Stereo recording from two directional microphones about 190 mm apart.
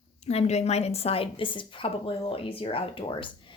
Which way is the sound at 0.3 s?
35° left (ahead or behind).